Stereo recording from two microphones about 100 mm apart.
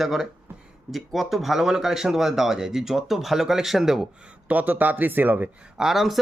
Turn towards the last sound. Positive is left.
turn(degrees=0)  # may be behind; listen again after turning